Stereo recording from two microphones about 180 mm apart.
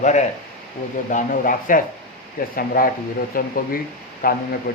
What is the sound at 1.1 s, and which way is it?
Speech, 50° left (ahead or behind).